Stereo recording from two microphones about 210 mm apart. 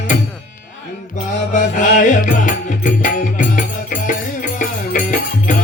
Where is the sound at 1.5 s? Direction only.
35° left (ahead or behind).